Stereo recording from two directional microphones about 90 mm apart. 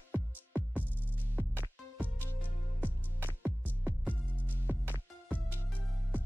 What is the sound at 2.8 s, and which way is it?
Music, 20° right (ahead or behind).